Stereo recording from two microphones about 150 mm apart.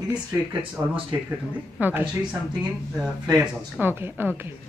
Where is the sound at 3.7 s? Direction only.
15° right (ahead or behind).